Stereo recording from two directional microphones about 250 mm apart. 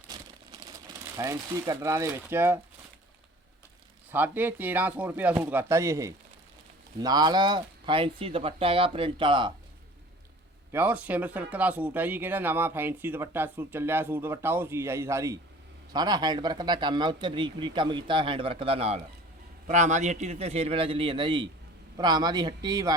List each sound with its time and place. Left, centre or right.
0.6 s speech: centre
4.1 s speech: centre
10.7 s speech: centre